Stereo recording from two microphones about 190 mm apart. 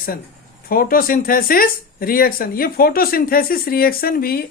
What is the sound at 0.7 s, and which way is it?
Speech, 50° left (ahead or behind).